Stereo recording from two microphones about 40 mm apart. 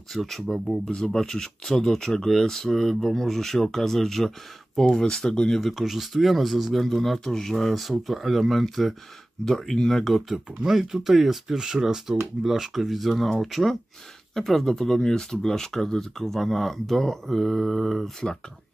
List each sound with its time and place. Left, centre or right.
0.1 s speech: centre
5.6 s speech: centre
10.2 s speech: centre